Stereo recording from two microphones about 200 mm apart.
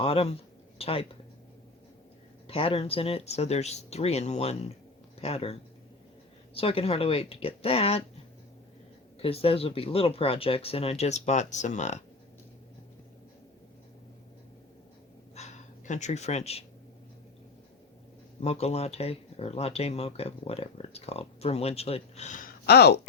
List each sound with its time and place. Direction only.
0.0 s speech: 30° left (ahead or behind)
2.5 s speech: 30° left (ahead or behind)
9.2 s speech: 30° left (ahead or behind)
15.4 s a sound: 35° left (ahead or behind)
15.9 s speech: 35° left (ahead or behind)
18.3 s speech: 30° left (ahead or behind)
22.6 s speech: 55° left (ahead or behind)